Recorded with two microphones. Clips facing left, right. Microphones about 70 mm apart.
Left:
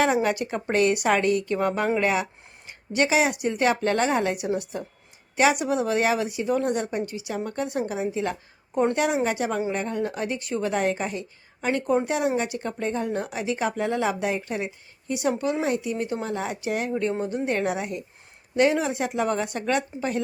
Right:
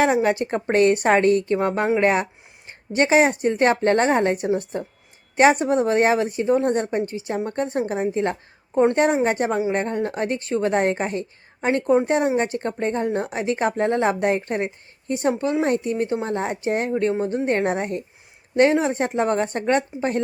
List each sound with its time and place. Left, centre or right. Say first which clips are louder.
0.0 s speech: right 3 dB; right
9.5 s speech: right 4 dB; centre
9.7 s speech: right 4 dB; right
15.1 s speech: right 3 dB; right